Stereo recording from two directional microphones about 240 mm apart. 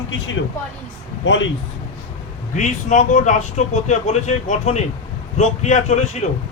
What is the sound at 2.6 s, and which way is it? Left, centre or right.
Speech, left.